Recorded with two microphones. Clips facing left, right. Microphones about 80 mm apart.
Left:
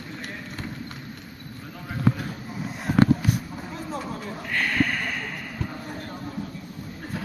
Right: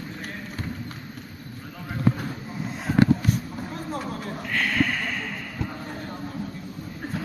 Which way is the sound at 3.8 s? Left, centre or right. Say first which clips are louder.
Even; centre.